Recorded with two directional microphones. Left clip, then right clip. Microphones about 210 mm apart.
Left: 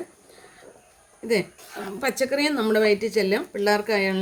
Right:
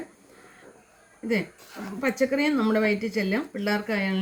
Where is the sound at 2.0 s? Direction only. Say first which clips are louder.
Left 1 dB; 55° left (ahead or behind).